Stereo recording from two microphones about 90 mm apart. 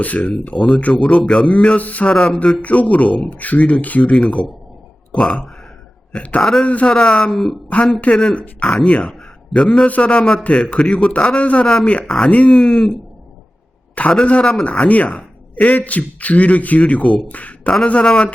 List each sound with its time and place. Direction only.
0.0 s a man's voice: 15° left (ahead or behind)
7.7 s a man's voice: 15° left (ahead or behind)